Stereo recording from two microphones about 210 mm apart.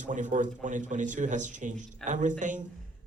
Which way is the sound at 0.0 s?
35° right (ahead or behind).